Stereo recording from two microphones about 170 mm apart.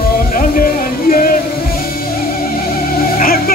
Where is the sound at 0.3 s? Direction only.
55° left (ahead or behind).